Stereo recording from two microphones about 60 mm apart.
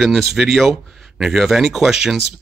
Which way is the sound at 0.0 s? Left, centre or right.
Centre.